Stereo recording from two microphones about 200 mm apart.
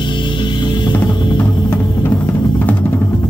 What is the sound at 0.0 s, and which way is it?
Music, 25° left (ahead or behind).